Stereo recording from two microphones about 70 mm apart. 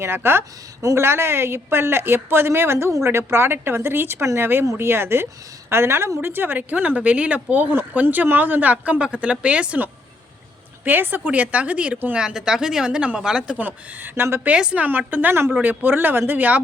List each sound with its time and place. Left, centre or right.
0.0 s a woman's voice: right
0.8 s speech: right
1.0 s a woman's voice: right
4.6 s speech: right
4.9 s a woman's voice: right; by 11.9 s centre
12.1 s a woman's voice: centre
13.6 s speech: right
14.4 s a woman's voice: centre
14.8 s speech: right